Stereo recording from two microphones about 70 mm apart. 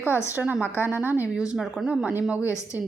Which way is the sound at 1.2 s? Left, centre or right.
Centre.